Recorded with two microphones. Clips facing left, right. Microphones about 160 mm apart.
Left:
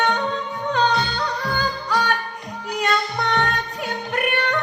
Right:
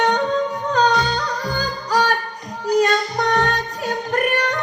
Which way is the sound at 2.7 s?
40° right (ahead or behind).